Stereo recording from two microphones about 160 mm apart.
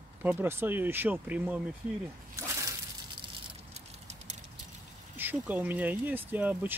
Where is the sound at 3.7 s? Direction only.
45° right (ahead or behind).